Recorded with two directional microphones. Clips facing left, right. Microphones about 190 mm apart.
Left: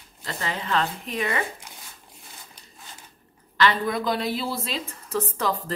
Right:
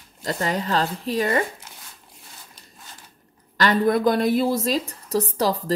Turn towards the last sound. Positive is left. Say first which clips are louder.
# right 4 dB
turn(degrees=-35)  # may be behind; listen again after turning